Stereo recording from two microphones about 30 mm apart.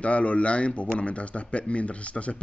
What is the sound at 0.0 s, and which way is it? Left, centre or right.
A man's voice, left.